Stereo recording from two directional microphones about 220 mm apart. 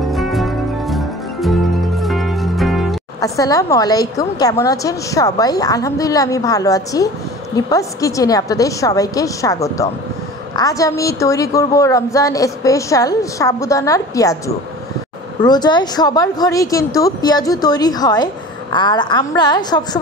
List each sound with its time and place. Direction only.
0.1 s music: centre (ahead or behind)
3.2 s speech: 15° left (ahead or behind)
15.4 s speech: 20° left (ahead or behind)